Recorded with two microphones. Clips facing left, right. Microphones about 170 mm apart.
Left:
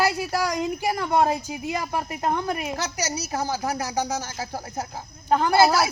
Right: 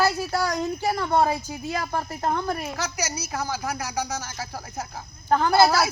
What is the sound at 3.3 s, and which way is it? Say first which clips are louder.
Speech: left 4 dB; 35° left (ahead or behind).